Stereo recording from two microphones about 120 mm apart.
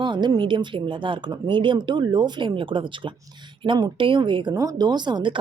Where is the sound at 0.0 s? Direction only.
40° right (ahead or behind).